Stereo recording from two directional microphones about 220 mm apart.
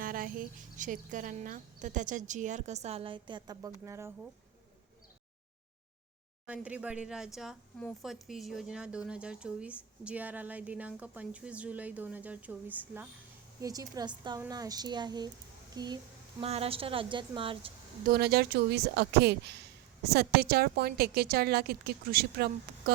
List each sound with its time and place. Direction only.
0.0 s speech: 40° right (ahead or behind); by 4.1 s 15° right (ahead or behind)
6.4 s a woman's voice: 5° right (ahead or behind); by 17.7 s 25° right (ahead or behind)
18.1 s a woman's voice: 45° right (ahead or behind)